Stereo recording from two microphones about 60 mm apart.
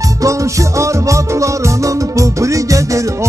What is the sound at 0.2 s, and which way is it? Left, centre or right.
Music, right.